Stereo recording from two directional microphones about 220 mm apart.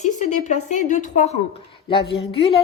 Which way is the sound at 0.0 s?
30° left (ahead or behind).